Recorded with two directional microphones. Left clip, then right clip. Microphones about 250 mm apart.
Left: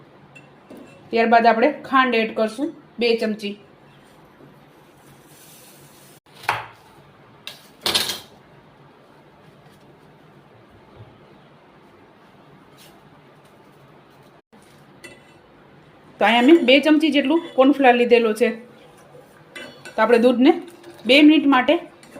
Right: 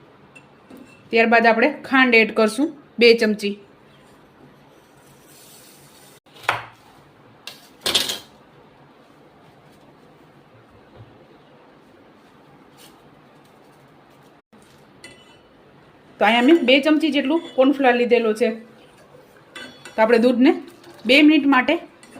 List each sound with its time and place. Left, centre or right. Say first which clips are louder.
1.1 s speech: even; centre
16.1 s speech: left 1 dB; centre
20.0 s a woman's voice: even; centre